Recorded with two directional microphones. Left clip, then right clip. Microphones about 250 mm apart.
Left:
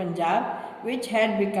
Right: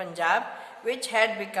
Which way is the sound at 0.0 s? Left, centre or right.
Right.